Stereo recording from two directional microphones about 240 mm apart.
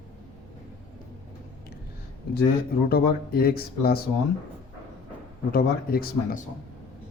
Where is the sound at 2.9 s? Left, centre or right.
Left.